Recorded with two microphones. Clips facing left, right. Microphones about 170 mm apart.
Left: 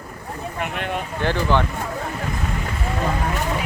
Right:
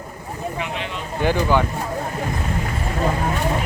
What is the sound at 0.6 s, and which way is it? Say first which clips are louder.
Speech: left 2 dB; 55° left (ahead or behind).